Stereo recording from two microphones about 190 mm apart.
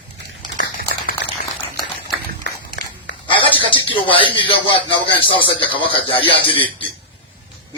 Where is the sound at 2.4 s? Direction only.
60° left (ahead or behind).